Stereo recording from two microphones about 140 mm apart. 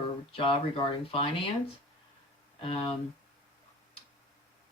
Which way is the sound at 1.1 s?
40° left (ahead or behind).